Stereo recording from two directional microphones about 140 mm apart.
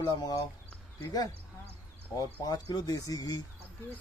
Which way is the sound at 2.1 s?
25° left (ahead or behind).